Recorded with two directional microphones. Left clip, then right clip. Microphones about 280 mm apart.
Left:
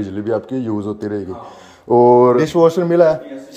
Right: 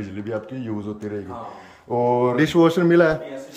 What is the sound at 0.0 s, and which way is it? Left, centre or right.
Speech, left.